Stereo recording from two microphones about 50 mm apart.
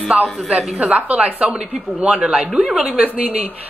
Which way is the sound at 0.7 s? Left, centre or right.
Right.